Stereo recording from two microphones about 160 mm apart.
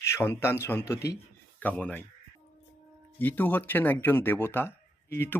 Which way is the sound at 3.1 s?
10° left (ahead or behind).